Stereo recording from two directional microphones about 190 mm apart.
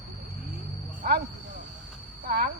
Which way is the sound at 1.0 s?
55° right (ahead or behind).